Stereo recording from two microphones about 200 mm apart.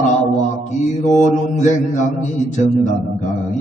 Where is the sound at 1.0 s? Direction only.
35° left (ahead or behind).